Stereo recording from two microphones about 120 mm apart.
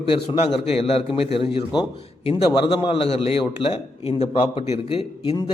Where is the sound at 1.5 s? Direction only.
40° left (ahead or behind).